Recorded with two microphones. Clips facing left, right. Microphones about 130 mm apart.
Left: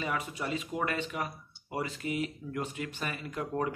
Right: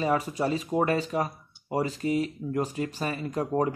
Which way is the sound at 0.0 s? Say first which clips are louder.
Right 8 dB; 35° right (ahead or behind).